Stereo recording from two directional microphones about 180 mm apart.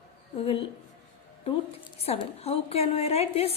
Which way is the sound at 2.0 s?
35° left (ahead or behind).